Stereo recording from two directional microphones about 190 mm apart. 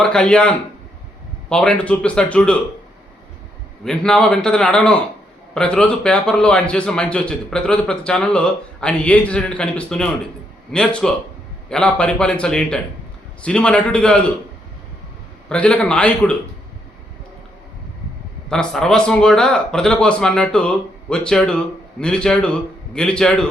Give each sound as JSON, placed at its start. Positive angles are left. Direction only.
{"t": 0.0, "sound": "speech", "side_deg": 5}
{"t": 3.8, "sound": "speech", "side_deg": 5}
{"t": 15.4, "sound": "speech", "side_deg": 5}
{"t": 18.4, "sound": "speech", "side_deg": 5}